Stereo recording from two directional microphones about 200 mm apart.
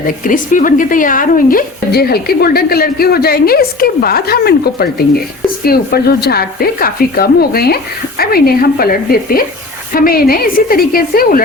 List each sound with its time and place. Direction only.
0.3 s speech: 40° left (ahead or behind)